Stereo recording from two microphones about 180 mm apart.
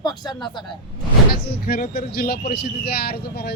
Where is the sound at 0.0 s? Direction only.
25° left (ahead or behind).